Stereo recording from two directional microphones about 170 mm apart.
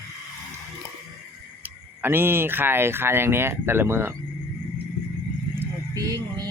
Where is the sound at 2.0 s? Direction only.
10° right (ahead or behind).